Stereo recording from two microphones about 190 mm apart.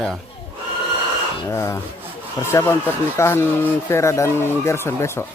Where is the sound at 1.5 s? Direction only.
15° left (ahead or behind).